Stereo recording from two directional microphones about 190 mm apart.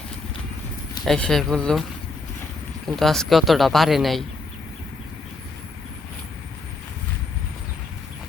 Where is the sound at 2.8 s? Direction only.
Centre (ahead or behind).